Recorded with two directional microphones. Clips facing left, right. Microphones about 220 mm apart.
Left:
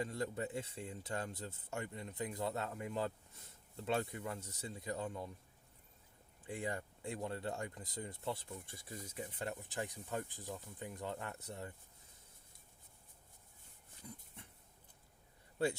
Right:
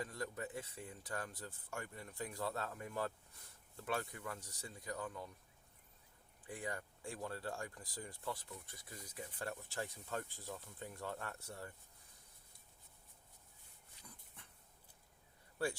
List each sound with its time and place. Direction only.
0.0 s speech: 25° left (ahead or behind)
6.4 s speech: 25° left (ahead or behind)
15.6 s speech: 25° left (ahead or behind)